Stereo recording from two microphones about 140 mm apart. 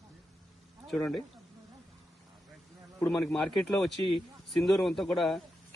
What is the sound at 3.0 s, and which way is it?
A man's voice, 15° left (ahead or behind).